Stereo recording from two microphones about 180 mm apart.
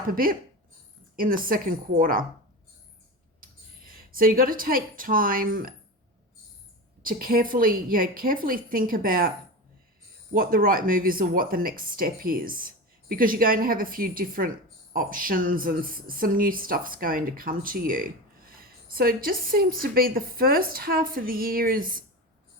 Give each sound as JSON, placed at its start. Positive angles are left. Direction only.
{"t": 0.1, "sound": "speech", "side_deg": -50}
{"t": 3.8, "sound": "speech", "side_deg": -55}
{"t": 7.0, "sound": "speech", "side_deg": -55}
{"t": 10.3, "sound": "speech", "side_deg": -50}